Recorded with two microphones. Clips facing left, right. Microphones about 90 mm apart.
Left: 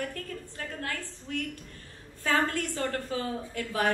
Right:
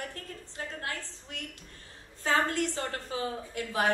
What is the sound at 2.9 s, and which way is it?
Speech, 45° left (ahead or behind).